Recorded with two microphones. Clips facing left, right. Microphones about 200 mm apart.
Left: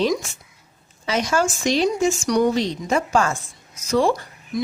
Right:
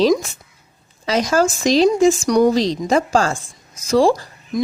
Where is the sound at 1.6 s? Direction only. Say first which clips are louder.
Right 8 dB; 90° right.